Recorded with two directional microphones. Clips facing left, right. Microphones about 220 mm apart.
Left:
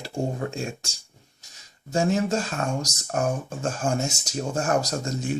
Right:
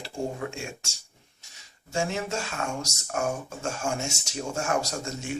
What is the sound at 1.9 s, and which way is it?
Speech, 40° left (ahead or behind).